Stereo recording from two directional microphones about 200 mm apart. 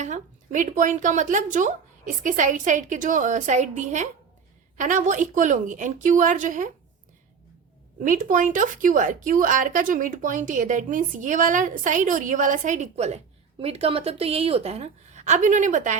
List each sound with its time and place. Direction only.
0.0 s a woman's voice: 40° right (ahead or behind)
8.0 s a woman's voice: 40° right (ahead or behind)